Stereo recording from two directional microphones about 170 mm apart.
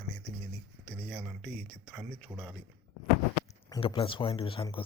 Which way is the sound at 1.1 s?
5° right (ahead or behind).